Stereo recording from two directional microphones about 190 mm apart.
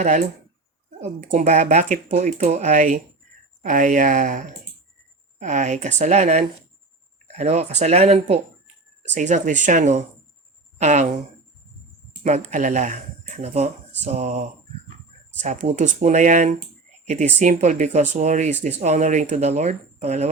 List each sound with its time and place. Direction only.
0.0 s speech: 40° right (ahead or behind)
12.2 s speech: 40° right (ahead or behind)